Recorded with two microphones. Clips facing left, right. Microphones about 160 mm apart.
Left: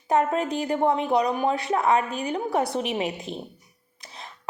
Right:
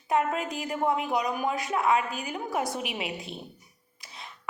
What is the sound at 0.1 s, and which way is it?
A woman's voice, 35° left (ahead or behind).